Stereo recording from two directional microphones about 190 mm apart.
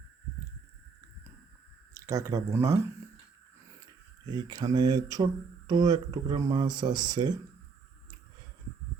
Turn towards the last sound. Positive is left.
turn(degrees=-20)  # may be behind; listen again after turning